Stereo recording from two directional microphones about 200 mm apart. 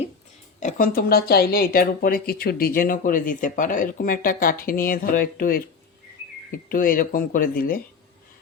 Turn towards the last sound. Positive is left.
turn(degrees=45)  # may be behind; listen again after turning